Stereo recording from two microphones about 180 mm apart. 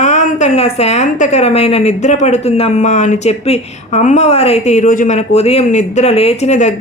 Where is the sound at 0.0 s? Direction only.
40° left (ahead or behind).